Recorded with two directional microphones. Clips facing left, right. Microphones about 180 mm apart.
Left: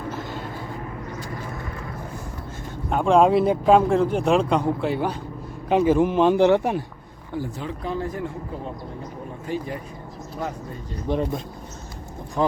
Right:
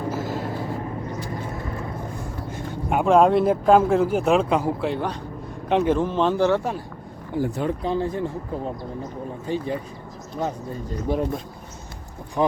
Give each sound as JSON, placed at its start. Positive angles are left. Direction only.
{"t": 0.1, "sound": "a sound", "side_deg": -5}
{"t": 2.9, "sound": "speech", "side_deg": -5}
{"t": 7.4, "sound": "speech", "side_deg": -65}
{"t": 7.9, "sound": "speech", "side_deg": -30}
{"t": 11.1, "sound": "speech", "side_deg": -5}